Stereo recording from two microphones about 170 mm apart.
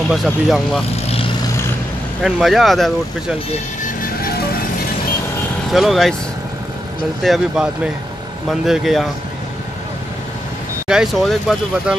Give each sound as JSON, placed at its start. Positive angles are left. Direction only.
{"t": 0.1, "sound": "speech", "side_deg": 0}
{"t": 0.9, "sound": "vehicle", "side_deg": 35}
{"t": 2.2, "sound": "speech", "side_deg": 0}
{"t": 5.7, "sound": "speech", "side_deg": 0}
{"t": 7.2, "sound": "speech", "side_deg": 0}
{"t": 10.9, "sound": "speech", "side_deg": 0}